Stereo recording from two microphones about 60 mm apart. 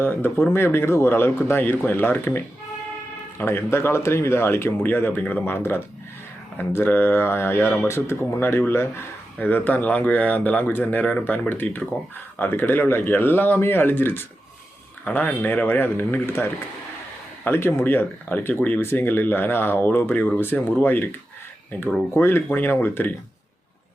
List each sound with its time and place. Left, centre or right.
0.0 s speech: left
9.4 s speech: left
11.0 s speech: left
11.4 s speech: left
22.1 s speech: left
22.4 s speech: left